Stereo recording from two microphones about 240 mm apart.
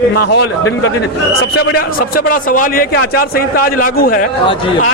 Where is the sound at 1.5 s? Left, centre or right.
Left.